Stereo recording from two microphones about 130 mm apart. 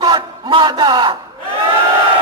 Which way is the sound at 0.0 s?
35° right (ahead or behind).